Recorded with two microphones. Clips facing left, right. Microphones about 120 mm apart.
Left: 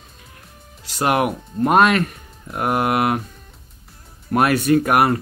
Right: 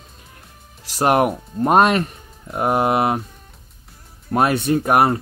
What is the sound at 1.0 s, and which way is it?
Speech, 40° right (ahead or behind).